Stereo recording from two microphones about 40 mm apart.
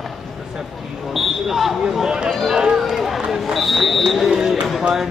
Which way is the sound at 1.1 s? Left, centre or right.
Centre.